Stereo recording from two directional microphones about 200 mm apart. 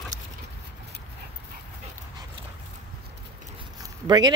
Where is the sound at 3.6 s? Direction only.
20° right (ahead or behind).